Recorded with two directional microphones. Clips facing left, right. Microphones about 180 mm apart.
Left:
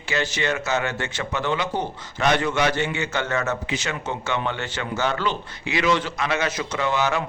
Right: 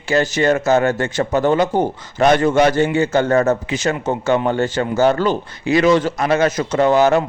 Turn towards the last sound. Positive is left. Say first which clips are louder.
# right 10 dB
turn(degrees=-45)  # may be behind; listen again after turning